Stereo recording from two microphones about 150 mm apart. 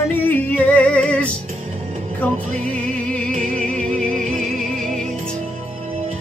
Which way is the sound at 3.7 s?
60° right (ahead or behind).